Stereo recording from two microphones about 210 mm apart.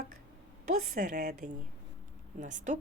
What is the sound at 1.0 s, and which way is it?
Speech, 45° right (ahead or behind).